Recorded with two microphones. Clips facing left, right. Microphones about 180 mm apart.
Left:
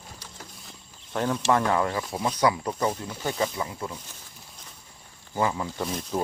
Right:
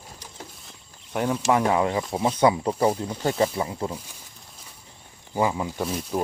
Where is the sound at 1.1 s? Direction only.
10° right (ahead or behind); by 3.9 s 30° right (ahead or behind).